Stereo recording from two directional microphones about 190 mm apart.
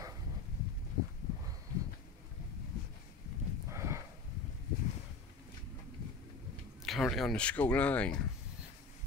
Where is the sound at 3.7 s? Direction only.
15° right (ahead or behind).